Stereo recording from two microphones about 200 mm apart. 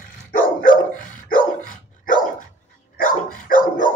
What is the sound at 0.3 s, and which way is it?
Dog, 45° left (ahead or behind).